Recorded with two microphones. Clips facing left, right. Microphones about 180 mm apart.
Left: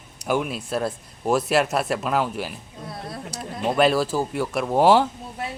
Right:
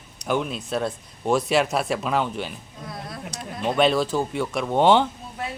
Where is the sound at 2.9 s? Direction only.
30° left (ahead or behind).